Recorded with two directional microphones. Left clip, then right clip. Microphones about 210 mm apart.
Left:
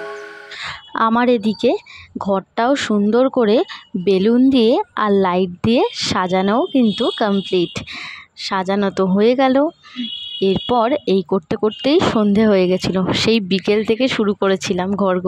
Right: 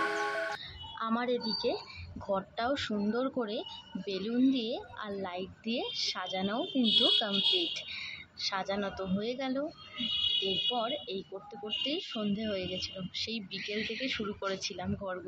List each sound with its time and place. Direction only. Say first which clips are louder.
0.7 s speech: left 18 dB; 50° left (ahead or behind)